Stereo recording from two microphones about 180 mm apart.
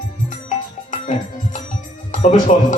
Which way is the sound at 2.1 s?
45° left (ahead or behind).